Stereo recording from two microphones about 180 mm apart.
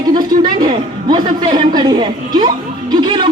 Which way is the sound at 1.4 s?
25° right (ahead or behind).